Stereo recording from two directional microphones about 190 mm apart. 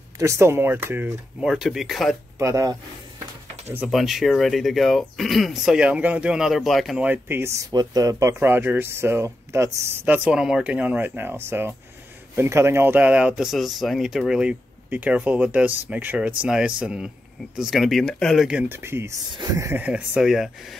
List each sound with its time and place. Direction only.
0.2 s speech: 15° right (ahead or behind)
2.3 s speech: 15° right (ahead or behind)
3.7 s speech: 5° right (ahead or behind)